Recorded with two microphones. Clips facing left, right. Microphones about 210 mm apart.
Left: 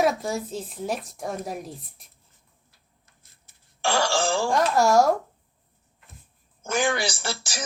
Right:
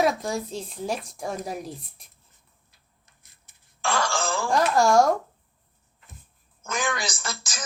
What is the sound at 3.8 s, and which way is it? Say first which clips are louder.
Speech: left 3 dB; 30° left (ahead or behind).